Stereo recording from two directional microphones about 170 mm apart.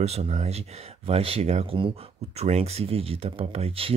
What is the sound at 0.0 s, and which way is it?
Speech, 40° right (ahead or behind).